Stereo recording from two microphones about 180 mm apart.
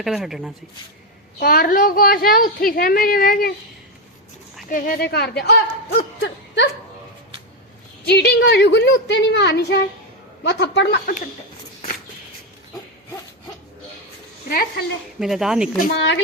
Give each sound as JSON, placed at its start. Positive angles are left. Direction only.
{"t": 0.0, "sound": "speech", "side_deg": 0}
{"t": 1.4, "sound": "a woman's voice", "side_deg": 55}
{"t": 4.7, "sound": "a woman's voice", "side_deg": 55}
{"t": 8.0, "sound": "a woman's voice", "side_deg": 65}
{"t": 14.5, "sound": "a woman's voice", "side_deg": 60}
{"t": 15.2, "sound": "speech", "side_deg": 0}
{"t": 15.9, "sound": "a woman's voice", "side_deg": 75}